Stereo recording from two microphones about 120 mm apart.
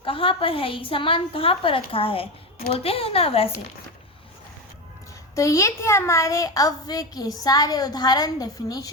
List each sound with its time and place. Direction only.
0.0 s a woman's voice: 50° left (ahead or behind)
5.3 s a child's voice: 25° left (ahead or behind)